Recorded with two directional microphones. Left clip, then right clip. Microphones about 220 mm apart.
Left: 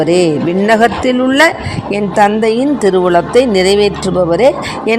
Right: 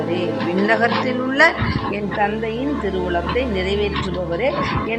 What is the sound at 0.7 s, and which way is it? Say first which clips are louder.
A woman's voice: left 9 dB; 35° left (ahead or behind).